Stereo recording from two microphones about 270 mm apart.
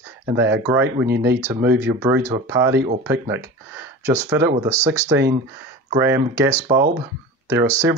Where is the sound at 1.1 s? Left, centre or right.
Right.